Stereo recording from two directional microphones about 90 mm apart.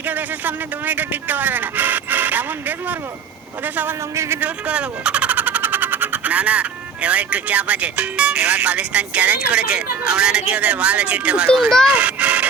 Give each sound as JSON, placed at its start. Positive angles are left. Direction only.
{"t": 0.0, "sound": "speech", "side_deg": -20}
{"t": 4.1, "sound": "a man's voice", "side_deg": -30}
{"t": 4.4, "sound": "speech", "side_deg": -15}
{"t": 11.9, "sound": "music", "side_deg": -15}